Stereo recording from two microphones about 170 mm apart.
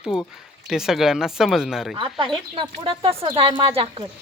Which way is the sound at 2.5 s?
30° right (ahead or behind).